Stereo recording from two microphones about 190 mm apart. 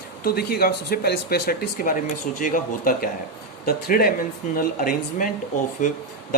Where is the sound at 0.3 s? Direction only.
55° left (ahead or behind).